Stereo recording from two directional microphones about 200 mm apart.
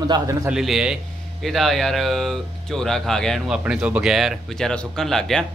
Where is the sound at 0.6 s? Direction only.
Centre (ahead or behind).